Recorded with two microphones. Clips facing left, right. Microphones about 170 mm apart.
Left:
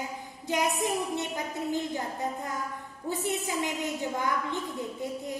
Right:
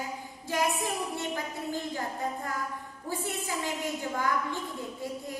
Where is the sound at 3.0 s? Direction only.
20° left (ahead or behind).